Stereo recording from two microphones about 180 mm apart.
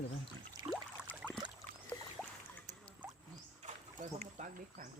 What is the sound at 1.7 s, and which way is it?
Boat, 50° right (ahead or behind).